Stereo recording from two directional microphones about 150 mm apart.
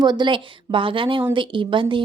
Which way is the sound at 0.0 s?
30° right (ahead or behind).